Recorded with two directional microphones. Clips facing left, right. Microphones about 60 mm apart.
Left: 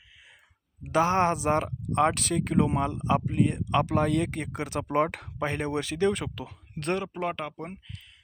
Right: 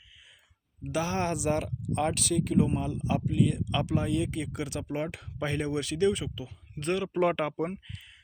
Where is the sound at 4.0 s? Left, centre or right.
Left.